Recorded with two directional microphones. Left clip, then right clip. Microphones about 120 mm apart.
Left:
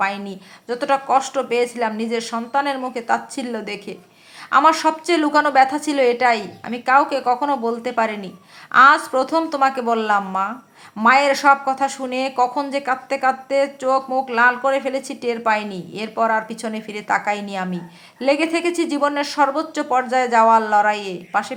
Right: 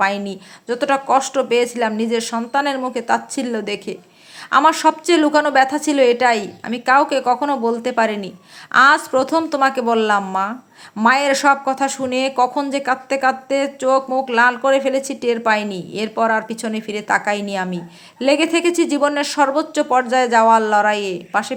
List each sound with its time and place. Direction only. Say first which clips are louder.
0.0 s speech: right 4 dB; 30° right (ahead or behind)